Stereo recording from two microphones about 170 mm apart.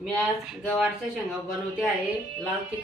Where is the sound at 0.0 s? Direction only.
Centre (ahead or behind).